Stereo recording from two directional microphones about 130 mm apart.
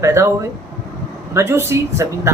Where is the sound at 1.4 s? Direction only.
20° right (ahead or behind).